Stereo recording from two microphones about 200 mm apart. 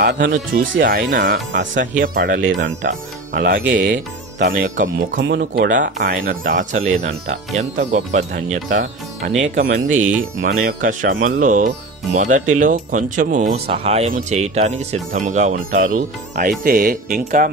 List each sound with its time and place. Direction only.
0.0 s speech: 50° right (ahead or behind); by 1.8 s 65° right (ahead or behind)
1.8 s speech: 45° right (ahead or behind)
5.1 s speech: 55° right (ahead or behind)